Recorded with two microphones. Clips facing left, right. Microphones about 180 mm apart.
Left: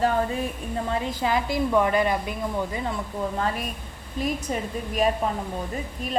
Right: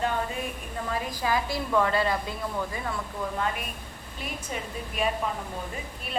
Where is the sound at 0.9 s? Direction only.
25° left (ahead or behind).